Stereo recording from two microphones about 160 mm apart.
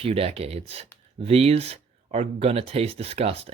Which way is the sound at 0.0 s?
35° right (ahead or behind).